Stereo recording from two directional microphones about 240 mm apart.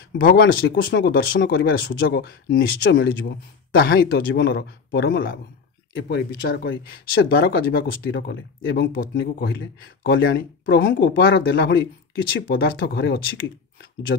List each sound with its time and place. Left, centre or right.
0.1 s speech: left